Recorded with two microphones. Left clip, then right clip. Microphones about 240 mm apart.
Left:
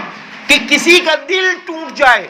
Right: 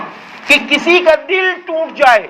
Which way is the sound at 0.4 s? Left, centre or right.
Left.